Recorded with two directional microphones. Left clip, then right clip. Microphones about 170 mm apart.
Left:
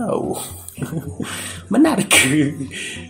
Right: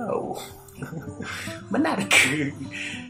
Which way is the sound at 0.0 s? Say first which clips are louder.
Left 6 dB; 35° left (ahead or behind).